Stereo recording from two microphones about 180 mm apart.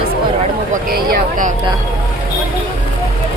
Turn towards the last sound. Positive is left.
turn(degrees=-50)  # may be behind; listen again after turning